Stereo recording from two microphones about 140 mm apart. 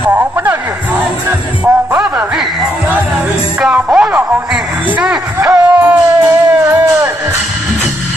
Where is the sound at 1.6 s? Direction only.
15° right (ahead or behind).